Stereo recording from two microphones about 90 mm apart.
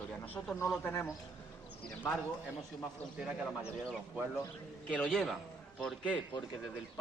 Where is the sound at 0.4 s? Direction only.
30° left (ahead or behind).